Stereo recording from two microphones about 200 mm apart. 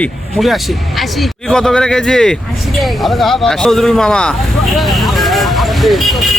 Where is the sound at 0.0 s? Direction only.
Centre (ahead or behind).